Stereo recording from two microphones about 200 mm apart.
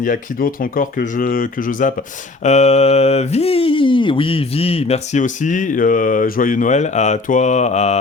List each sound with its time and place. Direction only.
0.0 s speech: 45° left (ahead or behind)